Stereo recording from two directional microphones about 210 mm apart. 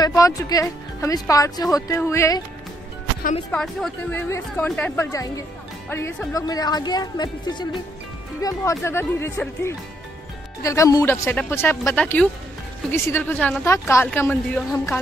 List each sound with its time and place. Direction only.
0.0 s speech: 15° left (ahead or behind)
3.5 s a woman's voice: 5° left (ahead or behind)